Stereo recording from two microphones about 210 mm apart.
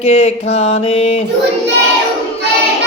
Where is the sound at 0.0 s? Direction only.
30° left (ahead or behind).